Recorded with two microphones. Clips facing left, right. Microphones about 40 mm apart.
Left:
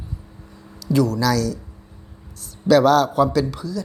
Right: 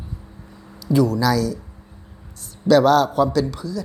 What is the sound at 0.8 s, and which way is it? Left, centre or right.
Speech, centre.